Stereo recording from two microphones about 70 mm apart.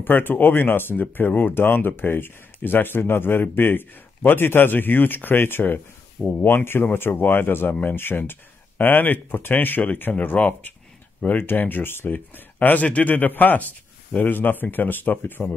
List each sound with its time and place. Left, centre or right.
0.0 s speech: left
12.5 s speech: left